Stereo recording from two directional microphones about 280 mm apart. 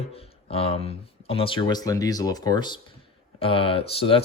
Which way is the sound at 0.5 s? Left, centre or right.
Left.